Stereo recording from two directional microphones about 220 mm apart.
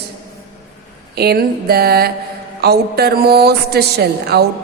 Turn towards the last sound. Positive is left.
turn(degrees=-45)  # may be behind; listen again after turning